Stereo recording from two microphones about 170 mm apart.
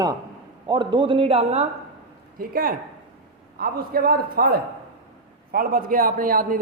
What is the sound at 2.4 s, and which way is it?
A man's voice, 60° right (ahead or behind).